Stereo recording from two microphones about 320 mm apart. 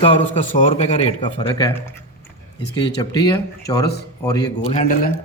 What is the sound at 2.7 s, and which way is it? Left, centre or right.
A man's voice, centre.